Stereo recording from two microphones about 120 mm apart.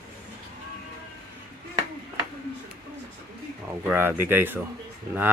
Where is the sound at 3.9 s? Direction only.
15° right (ahead or behind).